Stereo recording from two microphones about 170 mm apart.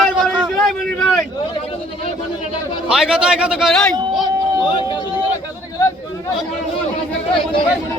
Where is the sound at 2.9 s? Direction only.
5° right (ahead or behind).